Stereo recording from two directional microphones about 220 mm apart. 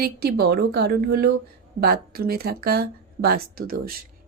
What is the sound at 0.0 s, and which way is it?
Speech, 45° right (ahead or behind).